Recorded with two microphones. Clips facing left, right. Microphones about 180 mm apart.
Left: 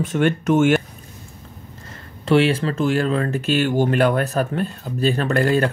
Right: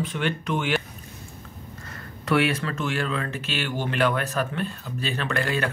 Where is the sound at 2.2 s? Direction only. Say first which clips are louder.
Left 6 dB; 25° left (ahead or behind).